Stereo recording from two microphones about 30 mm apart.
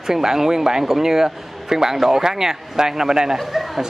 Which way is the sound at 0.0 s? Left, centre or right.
Centre.